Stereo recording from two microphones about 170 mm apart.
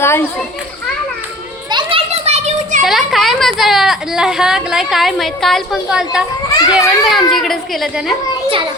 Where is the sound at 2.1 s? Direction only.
40° right (ahead or behind).